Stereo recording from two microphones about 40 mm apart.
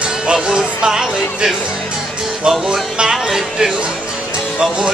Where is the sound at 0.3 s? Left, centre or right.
Centre.